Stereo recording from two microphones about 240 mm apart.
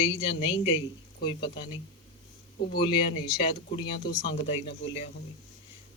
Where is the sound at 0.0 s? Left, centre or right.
Left.